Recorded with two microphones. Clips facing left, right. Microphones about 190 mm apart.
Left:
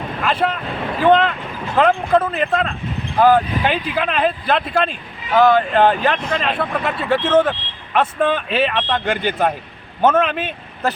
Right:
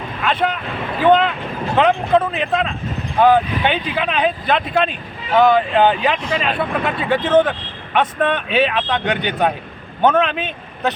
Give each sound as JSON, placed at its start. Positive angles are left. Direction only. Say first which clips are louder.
{"t": 0.2, "sound": "a man's voice", "louder": "even", "side_deg": 0}